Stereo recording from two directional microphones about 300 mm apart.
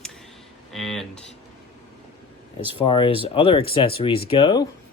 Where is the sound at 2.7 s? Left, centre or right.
Centre.